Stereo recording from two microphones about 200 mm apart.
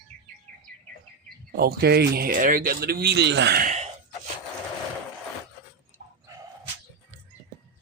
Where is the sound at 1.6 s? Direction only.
50° right (ahead or behind).